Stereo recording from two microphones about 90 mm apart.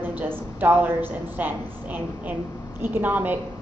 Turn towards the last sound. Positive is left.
turn(degrees=-20)  # may be behind; listen again after turning